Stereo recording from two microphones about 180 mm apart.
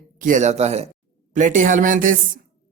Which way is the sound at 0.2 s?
45° right (ahead or behind).